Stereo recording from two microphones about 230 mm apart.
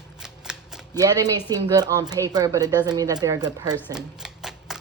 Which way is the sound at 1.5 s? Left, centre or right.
Centre.